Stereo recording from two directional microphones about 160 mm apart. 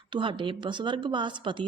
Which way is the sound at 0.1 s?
30° right (ahead or behind).